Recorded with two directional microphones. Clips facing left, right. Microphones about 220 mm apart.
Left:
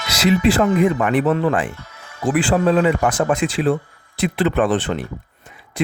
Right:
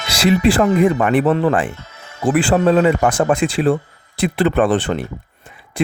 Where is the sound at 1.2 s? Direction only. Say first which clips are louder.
Right 2 dB; 30° right (ahead or behind).